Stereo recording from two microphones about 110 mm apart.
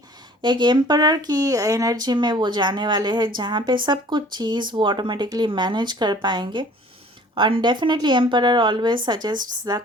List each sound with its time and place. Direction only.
0.4 s speech: 45° right (ahead or behind)